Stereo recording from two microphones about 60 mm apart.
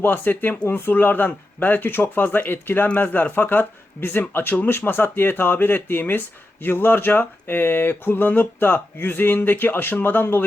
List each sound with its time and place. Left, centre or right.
0.0 s speech: left